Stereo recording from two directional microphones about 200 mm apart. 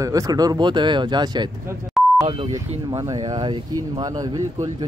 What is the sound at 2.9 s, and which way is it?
Speech, 15° right (ahead or behind).